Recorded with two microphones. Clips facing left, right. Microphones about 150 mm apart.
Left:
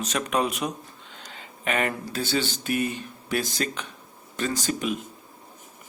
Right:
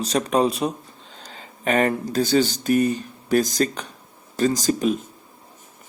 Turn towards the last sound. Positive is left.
turn(degrees=-35)  # may be behind; listen again after turning